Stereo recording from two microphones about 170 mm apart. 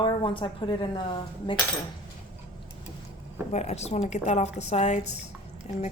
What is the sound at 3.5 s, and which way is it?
Speech, 40° left (ahead or behind).